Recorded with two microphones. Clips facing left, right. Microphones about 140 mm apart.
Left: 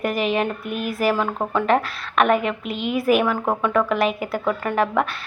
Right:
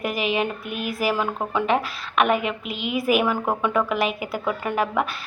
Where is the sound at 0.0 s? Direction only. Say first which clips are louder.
Left 2 dB; 5° right (ahead or behind).